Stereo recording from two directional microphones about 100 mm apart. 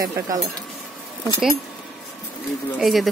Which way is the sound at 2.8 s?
Centre (ahead or behind).